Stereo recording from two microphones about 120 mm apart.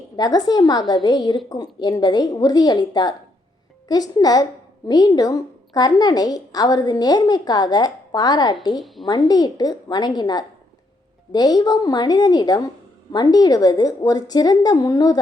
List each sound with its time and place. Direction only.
0.2 s a woman's voice: 35° left (ahead or behind)